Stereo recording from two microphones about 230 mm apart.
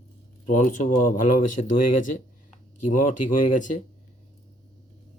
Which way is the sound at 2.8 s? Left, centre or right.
Left.